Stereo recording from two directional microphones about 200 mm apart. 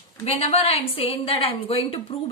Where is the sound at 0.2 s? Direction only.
30° left (ahead or behind).